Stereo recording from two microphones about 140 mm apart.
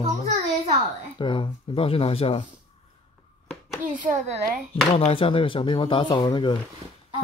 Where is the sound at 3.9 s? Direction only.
65° right (ahead or behind).